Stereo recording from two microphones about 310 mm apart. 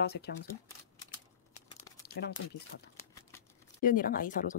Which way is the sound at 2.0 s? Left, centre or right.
Left.